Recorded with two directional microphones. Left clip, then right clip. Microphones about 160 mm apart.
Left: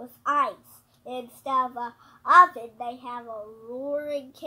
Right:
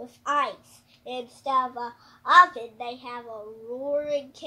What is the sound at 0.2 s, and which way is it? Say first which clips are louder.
A child's voice: left 1 dB; 20° right (ahead or behind).